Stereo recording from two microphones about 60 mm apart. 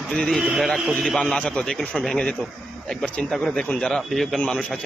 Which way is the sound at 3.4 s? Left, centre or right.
Centre.